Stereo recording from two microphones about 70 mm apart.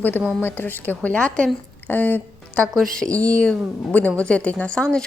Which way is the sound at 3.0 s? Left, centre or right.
Centre.